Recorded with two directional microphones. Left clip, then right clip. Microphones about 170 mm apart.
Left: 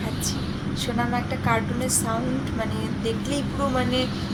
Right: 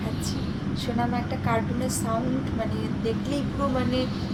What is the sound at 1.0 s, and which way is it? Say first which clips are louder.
Speech: left 2 dB; 10° left (ahead or behind).